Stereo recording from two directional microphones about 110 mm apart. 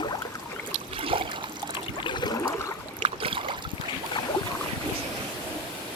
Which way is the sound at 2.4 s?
30° left (ahead or behind).